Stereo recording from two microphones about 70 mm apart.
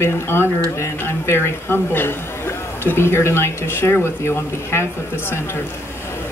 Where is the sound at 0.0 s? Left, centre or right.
Left.